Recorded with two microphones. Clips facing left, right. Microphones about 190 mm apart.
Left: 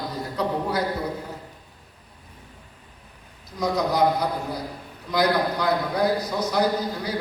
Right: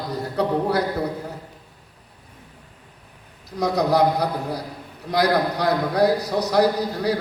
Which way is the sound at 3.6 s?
65° right (ahead or behind).